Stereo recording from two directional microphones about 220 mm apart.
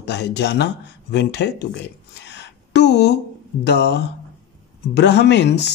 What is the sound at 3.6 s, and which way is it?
A man's voice, 50° left (ahead or behind).